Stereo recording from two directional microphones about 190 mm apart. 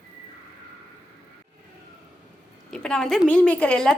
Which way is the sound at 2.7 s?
5° left (ahead or behind).